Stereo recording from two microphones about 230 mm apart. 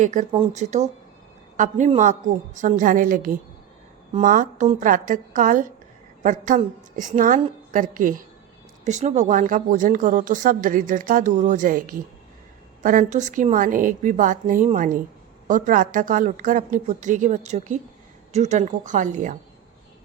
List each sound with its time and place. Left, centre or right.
0.0 s speech: right